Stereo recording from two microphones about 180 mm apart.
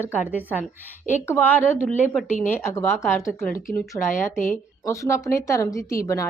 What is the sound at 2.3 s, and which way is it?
Speech, 45° left (ahead or behind).